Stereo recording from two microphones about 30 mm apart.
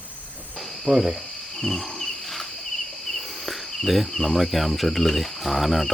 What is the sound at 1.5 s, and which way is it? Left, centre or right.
Wild animals, centre.